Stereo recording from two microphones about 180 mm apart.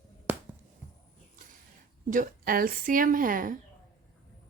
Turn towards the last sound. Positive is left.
turn(degrees=-50)  # may be behind; listen again after turning